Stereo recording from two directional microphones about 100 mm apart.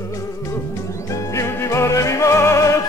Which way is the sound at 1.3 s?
30° left (ahead or behind).